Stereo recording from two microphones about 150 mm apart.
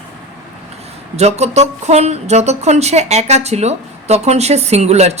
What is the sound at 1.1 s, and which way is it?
A man's voice, 45° right (ahead or behind).